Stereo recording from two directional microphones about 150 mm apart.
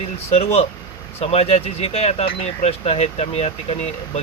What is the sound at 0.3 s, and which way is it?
Speech, 45° left (ahead or behind).